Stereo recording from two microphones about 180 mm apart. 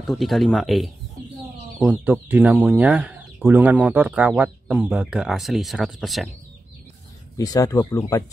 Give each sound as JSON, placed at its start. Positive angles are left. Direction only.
{"t": 0.0, "sound": "speech", "side_deg": 0}
{"t": 7.3, "sound": "speech", "side_deg": 20}